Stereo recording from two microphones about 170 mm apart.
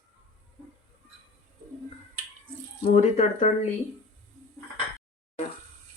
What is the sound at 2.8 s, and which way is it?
Speech, 45° left (ahead or behind).